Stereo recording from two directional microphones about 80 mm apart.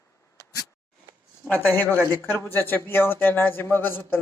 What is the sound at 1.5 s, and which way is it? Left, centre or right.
A man's voice, left.